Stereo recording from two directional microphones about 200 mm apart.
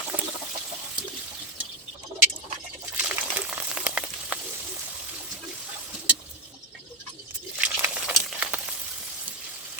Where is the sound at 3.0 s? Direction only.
5° right (ahead or behind).